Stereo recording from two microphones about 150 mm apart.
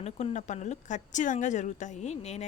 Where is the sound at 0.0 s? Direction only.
45° left (ahead or behind).